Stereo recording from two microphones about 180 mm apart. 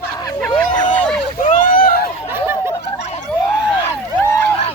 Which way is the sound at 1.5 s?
50° left (ahead or behind).